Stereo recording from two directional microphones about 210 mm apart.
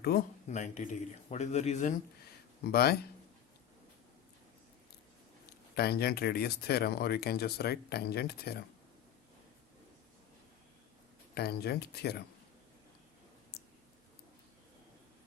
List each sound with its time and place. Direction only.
0.1 s speech: 45° left (ahead or behind)
0.4 s speech: 35° left (ahead or behind)
2.6 s speech: 45° left (ahead or behind)
5.7 s speech: 50° left (ahead or behind)
11.3 s speech: 50° left (ahead or behind)
13.5 s a sound: 50° left (ahead or behind)